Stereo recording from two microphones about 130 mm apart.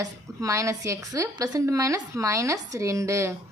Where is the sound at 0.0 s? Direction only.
25° right (ahead or behind).